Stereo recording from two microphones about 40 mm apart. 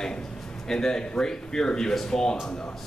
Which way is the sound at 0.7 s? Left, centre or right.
Centre.